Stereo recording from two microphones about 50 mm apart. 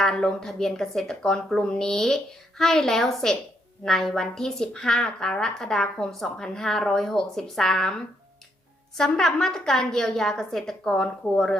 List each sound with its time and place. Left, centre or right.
0.0 s speech: centre